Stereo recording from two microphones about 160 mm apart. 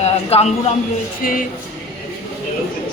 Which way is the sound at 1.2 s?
60° left (ahead or behind).